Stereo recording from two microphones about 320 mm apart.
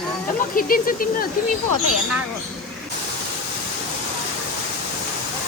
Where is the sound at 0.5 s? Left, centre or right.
Left.